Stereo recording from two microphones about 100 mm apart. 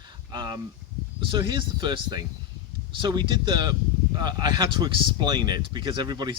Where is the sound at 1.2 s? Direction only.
50° right (ahead or behind).